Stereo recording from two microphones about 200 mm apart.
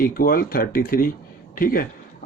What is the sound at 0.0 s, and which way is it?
Speech, 45° left (ahead or behind).